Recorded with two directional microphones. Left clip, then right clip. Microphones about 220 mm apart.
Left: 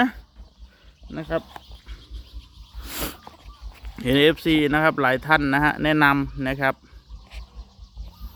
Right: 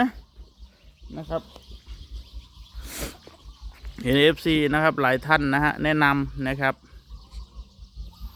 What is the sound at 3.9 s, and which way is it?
Speech, centre (ahead or behind).